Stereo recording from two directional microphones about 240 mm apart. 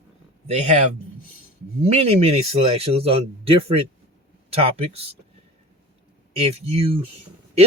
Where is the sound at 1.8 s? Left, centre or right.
Right.